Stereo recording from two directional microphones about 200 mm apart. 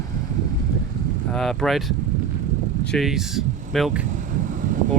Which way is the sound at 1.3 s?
Centre (ahead or behind).